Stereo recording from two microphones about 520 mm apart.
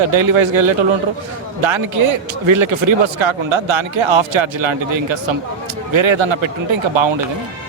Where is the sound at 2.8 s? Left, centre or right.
Right.